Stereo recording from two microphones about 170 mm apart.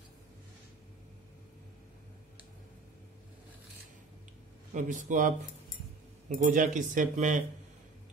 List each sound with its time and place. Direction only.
4.7 s speech: 45° right (ahead or behind)